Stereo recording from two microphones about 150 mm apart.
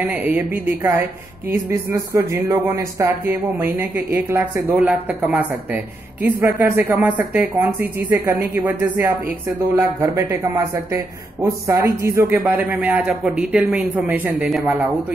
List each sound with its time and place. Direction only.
0.0 s speech: 10° right (ahead or behind)